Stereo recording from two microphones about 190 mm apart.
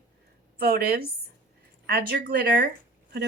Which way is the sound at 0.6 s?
50° right (ahead or behind).